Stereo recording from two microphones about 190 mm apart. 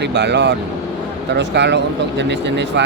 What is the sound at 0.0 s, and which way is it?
Speech, 65° right (ahead or behind).